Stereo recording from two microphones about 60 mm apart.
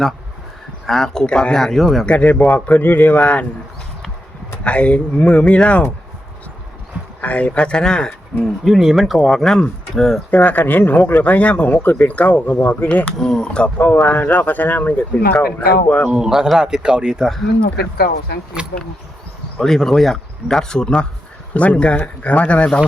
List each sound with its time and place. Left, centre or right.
0.9 s speech: centre
2.0 s speech: left
4.6 s speech: centre
7.2 s speech: left
8.4 s speech: centre
10.3 s speech: left
13.1 s speech: centre
13.7 s speech: left
16.0 s speech: centre
18.6 s speech: centre
19.5 s speech: centre